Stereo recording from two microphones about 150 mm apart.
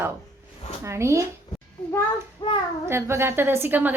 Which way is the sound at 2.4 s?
35° left (ahead or behind).